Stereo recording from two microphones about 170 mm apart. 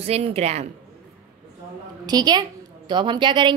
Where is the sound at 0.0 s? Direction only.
40° right (ahead or behind).